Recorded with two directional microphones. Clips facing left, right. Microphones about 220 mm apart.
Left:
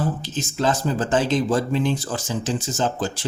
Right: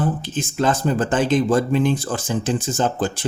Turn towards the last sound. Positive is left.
turn(degrees=-55)  # may be behind; listen again after turning